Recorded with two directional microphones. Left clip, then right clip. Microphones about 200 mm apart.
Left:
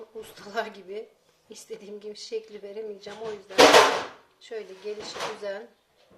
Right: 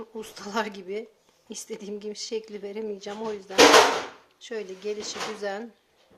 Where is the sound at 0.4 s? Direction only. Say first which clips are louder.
Right 2 dB; 50° right (ahead or behind).